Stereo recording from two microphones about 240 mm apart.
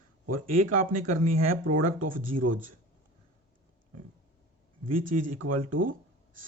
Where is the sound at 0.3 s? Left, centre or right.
Right.